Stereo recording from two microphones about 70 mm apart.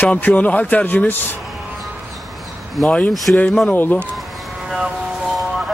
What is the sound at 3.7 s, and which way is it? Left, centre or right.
Speech, left.